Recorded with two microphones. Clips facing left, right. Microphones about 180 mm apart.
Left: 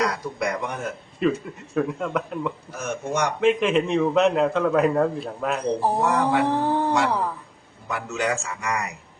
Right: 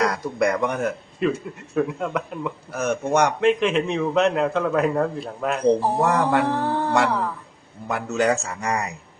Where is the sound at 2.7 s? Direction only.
65° right (ahead or behind).